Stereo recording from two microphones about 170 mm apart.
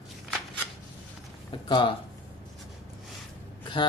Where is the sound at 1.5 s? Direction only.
30° left (ahead or behind).